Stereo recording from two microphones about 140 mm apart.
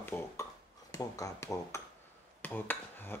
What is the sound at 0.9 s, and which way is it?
Speech, 25° left (ahead or behind).